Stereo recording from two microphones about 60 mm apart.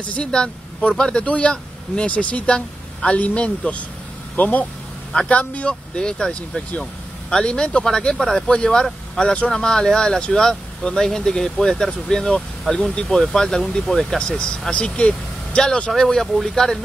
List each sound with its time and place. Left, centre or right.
0.0 s speech: centre
16.1 s speech: centre